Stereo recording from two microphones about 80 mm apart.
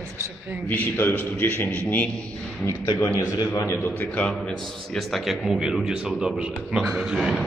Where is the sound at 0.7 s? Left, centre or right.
Left.